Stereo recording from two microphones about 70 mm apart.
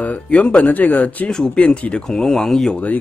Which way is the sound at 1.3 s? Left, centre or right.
Centre.